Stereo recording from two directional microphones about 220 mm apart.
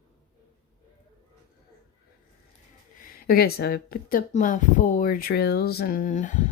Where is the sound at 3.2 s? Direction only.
45° left (ahead or behind).